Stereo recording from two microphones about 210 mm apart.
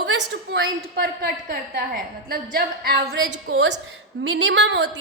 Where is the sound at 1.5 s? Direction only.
45° right (ahead or behind).